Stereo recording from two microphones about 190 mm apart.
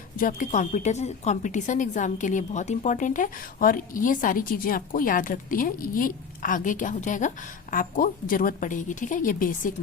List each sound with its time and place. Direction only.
0.2 s a woman's voice: 45° left (ahead or behind)